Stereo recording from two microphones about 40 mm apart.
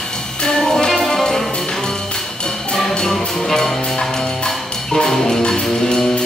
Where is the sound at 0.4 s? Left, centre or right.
Centre.